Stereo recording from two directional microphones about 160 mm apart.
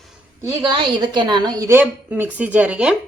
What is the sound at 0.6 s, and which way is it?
A woman's voice, 30° right (ahead or behind).